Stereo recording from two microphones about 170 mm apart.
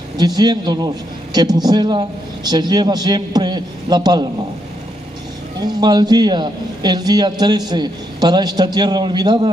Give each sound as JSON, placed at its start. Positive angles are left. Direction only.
{"t": 0.2, "sound": "a man's voice", "side_deg": -25}
{"t": 5.7, "sound": "a man's voice", "side_deg": -25}